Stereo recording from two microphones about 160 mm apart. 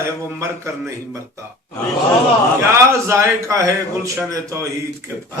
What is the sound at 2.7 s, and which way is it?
A man's voice, 15° right (ahead or behind).